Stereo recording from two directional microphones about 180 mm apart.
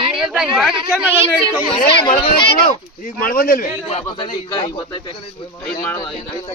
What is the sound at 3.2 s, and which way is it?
Speech, 55° left (ahead or behind).